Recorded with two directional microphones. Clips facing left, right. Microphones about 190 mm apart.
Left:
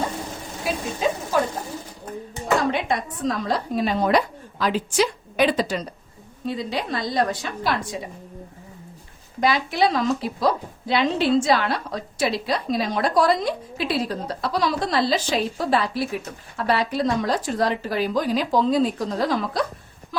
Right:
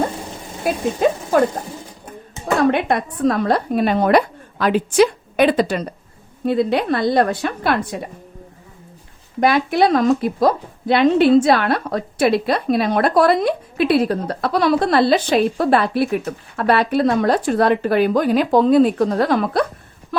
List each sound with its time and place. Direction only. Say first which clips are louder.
0.6 s speech: right 7 dB; 55° right (ahead or behind)
2.6 s a woman's voice: right 10 dB; 60° right (ahead or behind)
9.4 s a woman's voice: right 5 dB; 55° right (ahead or behind)